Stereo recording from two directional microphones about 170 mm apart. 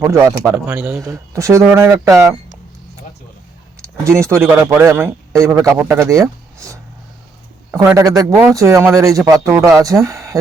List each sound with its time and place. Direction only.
0.0 s a man's voice: 15° right (ahead or behind)
0.5 s a man's voice: 5° right (ahead or behind)
4.4 s a man's voice: 15° right (ahead or behind)